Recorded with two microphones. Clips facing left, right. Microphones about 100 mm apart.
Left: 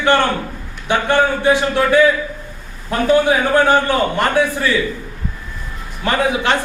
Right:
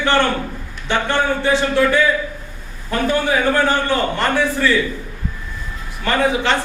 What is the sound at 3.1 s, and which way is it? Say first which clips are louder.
Speech: left 4 dB; 15° left (ahead or behind).